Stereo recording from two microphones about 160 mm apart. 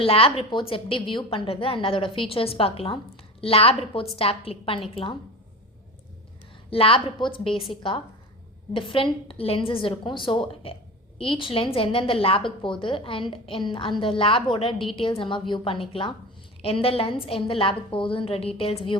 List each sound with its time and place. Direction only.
0.0 s a woman's voice: 35° left (ahead or behind)
6.7 s a woman's voice: 35° left (ahead or behind)